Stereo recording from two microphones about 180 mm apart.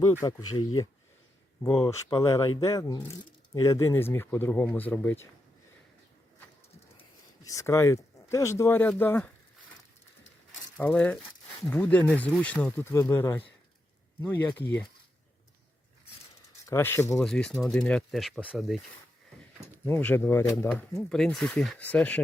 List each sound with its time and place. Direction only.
0.0 s speech: 20° left (ahead or behind)
7.4 s speech: 15° left (ahead or behind)
10.8 s speech: 10° left (ahead or behind)
16.6 s speech: 15° left (ahead or behind)
17.2 s speech: 5° left (ahead or behind)
19.6 s speech: 15° left (ahead or behind)
20.7 s speech: 5° left (ahead or behind)